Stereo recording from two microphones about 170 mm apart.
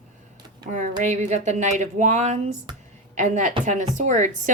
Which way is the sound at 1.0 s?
45° right (ahead or behind).